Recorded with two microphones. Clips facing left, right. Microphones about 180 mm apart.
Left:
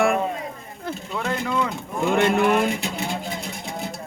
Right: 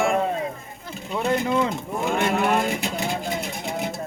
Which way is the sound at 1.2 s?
20° right (ahead or behind).